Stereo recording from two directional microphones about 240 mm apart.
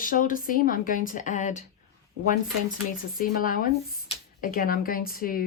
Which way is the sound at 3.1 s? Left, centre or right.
Left.